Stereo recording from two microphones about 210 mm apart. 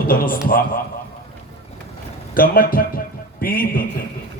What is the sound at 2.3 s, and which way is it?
A man's voice, 45° left (ahead or behind).